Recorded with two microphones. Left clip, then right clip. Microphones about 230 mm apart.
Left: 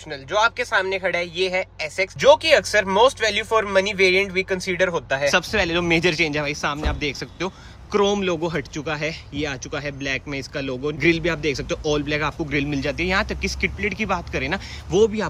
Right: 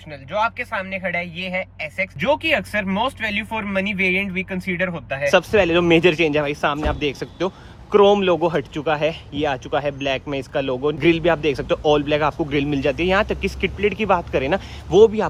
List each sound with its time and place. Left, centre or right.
0.1 s a man's voice: left